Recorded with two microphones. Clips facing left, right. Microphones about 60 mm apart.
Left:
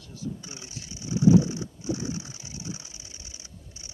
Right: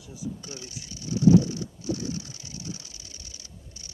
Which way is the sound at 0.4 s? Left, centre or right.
Left.